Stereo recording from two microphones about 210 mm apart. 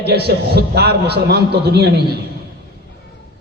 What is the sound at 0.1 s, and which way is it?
A man's voice, 50° right (ahead or behind).